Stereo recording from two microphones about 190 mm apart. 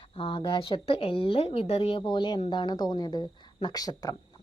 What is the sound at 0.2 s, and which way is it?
A woman's voice, 25° left (ahead or behind).